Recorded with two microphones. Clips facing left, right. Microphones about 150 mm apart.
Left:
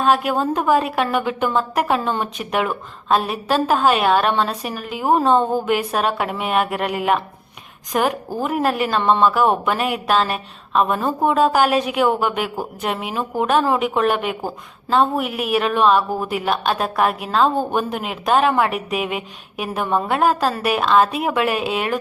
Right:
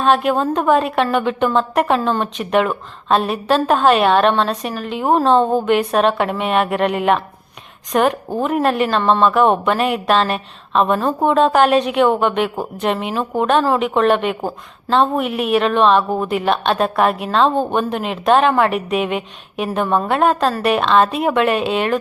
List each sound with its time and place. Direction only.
0.0 s speech: 5° left (ahead or behind)